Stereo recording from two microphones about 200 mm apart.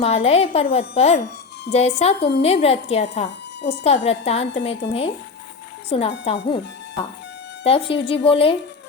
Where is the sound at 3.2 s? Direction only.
60° left (ahead or behind).